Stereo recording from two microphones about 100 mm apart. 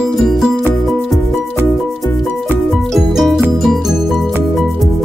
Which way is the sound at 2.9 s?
5° right (ahead or behind).